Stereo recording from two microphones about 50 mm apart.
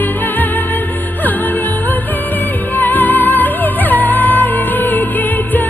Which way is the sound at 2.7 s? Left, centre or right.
Left.